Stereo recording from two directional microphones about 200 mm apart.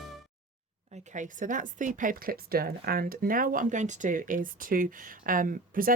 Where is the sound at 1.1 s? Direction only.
40° right (ahead or behind).